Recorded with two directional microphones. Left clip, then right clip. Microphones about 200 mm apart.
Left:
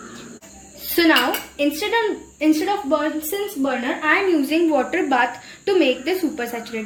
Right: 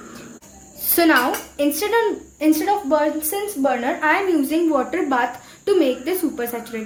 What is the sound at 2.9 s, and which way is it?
A woman's voice, 30° right (ahead or behind).